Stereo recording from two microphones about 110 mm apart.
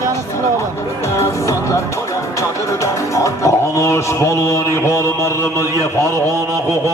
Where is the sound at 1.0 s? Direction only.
25° left (ahead or behind).